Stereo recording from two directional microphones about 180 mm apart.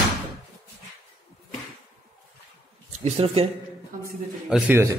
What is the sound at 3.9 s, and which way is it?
Speech, 50° right (ahead or behind).